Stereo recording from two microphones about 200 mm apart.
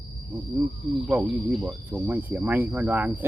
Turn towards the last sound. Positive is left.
turn(degrees=-10)  # may be behind; listen again after turning